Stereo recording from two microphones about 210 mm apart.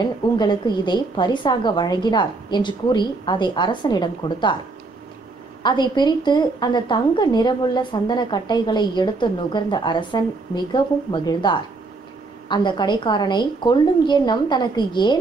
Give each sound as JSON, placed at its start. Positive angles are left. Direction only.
{"t": 0.0, "sound": "a woman's voice", "side_deg": 20}
{"t": 5.6, "sound": "a woman's voice", "side_deg": 20}